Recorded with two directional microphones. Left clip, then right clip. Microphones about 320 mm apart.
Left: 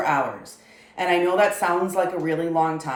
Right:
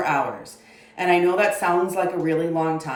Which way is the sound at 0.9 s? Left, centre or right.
Centre.